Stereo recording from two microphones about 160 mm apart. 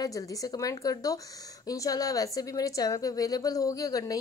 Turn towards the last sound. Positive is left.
turn(degrees=20)  # may be behind; listen again after turning